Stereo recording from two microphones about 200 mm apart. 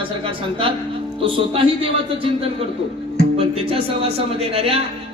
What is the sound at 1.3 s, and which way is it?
Speech, 25° right (ahead or behind).